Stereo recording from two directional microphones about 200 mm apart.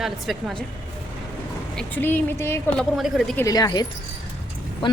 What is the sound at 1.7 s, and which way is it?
A woman's voice, 10° left (ahead or behind).